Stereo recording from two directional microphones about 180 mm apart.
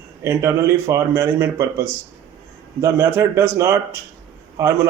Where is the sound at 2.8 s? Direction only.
15° right (ahead or behind).